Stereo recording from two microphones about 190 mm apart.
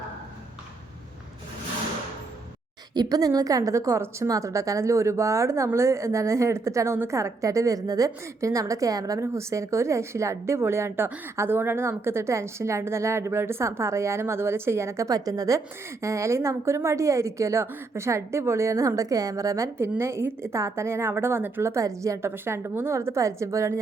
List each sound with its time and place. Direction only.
2.9 s a woman's voice: 20° right (ahead or behind)